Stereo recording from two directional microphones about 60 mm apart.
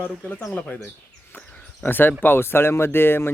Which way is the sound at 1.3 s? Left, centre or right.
Left.